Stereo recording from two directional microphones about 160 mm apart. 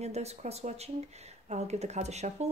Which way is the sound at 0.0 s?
40° right (ahead or behind).